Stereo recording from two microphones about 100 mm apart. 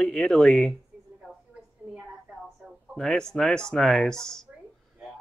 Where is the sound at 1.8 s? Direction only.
20° right (ahead or behind).